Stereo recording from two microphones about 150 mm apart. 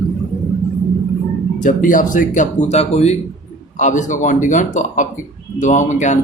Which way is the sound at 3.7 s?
55° left (ahead or behind).